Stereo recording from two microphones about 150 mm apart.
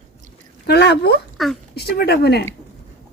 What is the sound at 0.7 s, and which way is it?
Speech, 90° left.